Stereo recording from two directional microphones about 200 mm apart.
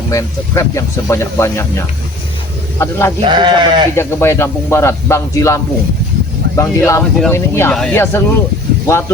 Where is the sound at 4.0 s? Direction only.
10° left (ahead or behind).